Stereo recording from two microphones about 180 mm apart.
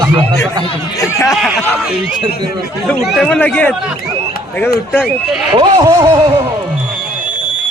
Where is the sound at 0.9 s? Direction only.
15° left (ahead or behind).